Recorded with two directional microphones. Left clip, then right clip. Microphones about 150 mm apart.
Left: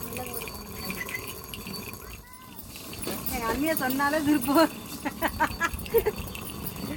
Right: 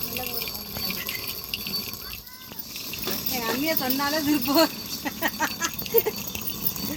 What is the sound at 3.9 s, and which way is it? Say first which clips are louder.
Speech: even; 15° right (ahead or behind).